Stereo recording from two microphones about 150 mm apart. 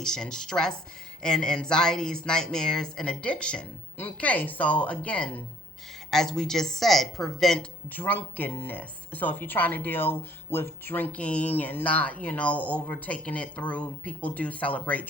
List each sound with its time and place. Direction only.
0.0 s speech: 5° left (ahead or behind)